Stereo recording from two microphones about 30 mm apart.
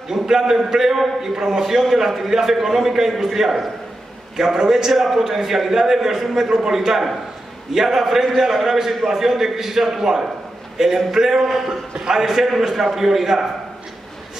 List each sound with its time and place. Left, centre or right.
0.1 s a man's voice: centre
4.9 s a man's voice: centre